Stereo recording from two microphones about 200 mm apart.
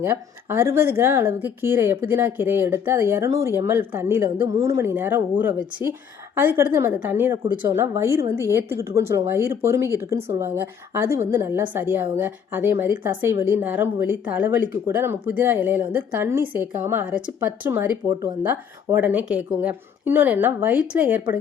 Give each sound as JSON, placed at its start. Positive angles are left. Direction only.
{"t": 0.0, "sound": "speech", "side_deg": -10}
{"t": 18.1, "sound": "speech", "side_deg": -20}
{"t": 18.9, "sound": "speech", "side_deg": -10}